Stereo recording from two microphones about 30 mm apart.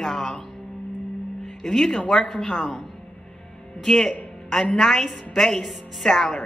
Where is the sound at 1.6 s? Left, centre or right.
Centre.